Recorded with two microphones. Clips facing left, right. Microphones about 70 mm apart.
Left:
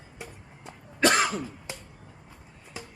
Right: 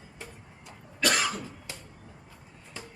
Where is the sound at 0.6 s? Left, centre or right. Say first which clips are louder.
Left 6 dB; left.